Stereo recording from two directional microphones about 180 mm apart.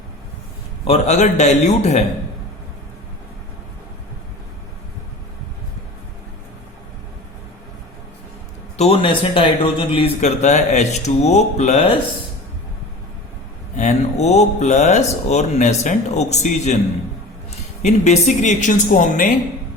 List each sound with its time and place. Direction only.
0.9 s speech: 40° left (ahead or behind)
8.8 s speech: 30° left (ahead or behind)
13.7 s speech: 40° left (ahead or behind)
17.8 s speech: 40° left (ahead or behind)